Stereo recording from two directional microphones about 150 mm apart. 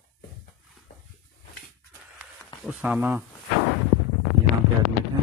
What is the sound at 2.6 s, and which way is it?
Speech, 5° right (ahead or behind).